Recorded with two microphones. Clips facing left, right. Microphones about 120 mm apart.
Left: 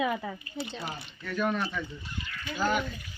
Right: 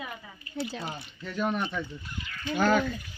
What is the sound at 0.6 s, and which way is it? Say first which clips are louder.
Speech: right 5 dB; centre (ahead or behind).